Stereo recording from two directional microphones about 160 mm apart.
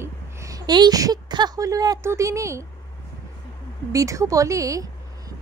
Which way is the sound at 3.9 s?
20° right (ahead or behind).